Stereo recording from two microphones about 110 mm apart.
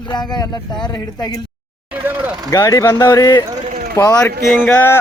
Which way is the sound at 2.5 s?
30° left (ahead or behind).